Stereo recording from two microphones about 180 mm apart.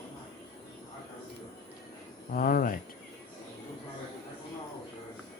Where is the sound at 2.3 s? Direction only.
50° left (ahead or behind).